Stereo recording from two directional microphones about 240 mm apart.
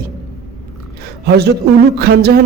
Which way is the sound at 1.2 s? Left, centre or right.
Right.